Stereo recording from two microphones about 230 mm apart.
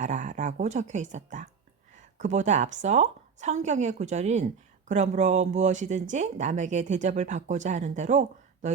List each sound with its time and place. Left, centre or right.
0.0 s speech: right